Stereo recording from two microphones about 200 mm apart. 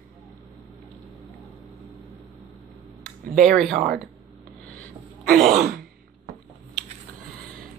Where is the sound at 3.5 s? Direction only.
45° right (ahead or behind).